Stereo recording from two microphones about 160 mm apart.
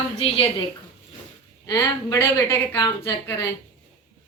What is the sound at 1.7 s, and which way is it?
A woman's voice, 15° left (ahead or behind).